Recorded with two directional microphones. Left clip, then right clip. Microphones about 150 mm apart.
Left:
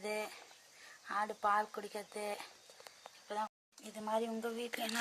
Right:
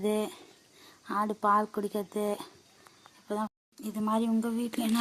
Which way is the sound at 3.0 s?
15° right (ahead or behind).